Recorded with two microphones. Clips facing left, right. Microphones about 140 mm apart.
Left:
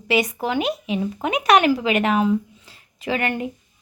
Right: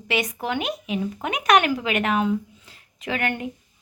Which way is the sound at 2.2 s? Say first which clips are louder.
Left 4 dB; 30° left (ahead or behind).